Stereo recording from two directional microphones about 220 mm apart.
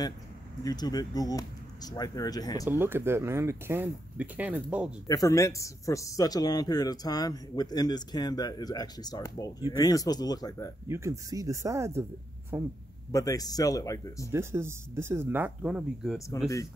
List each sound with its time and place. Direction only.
0.7 s a man's voice: 20° left (ahead or behind)
2.7 s speech: 10° right (ahead or behind)
5.0 s a man's voice: 15° left (ahead or behind)
10.9 s speech: 15° right (ahead or behind)
13.1 s a man's voice: 15° left (ahead or behind)
14.3 s speech: 10° right (ahead or behind)